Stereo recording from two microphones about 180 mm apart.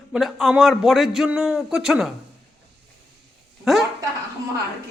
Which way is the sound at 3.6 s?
Centre (ahead or behind).